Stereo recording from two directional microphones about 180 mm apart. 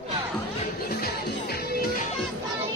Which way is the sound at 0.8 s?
60° left (ahead or behind).